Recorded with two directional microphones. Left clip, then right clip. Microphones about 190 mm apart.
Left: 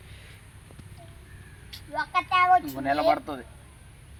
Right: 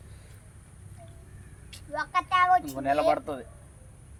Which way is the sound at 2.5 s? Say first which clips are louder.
Left 1 dB; 25° right (ahead or behind).